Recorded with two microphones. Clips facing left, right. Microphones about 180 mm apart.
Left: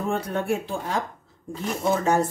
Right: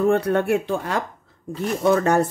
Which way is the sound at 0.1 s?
65° right (ahead or behind).